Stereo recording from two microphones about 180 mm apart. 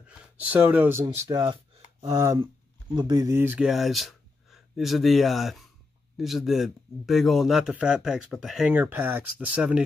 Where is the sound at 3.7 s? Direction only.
Centre (ahead or behind).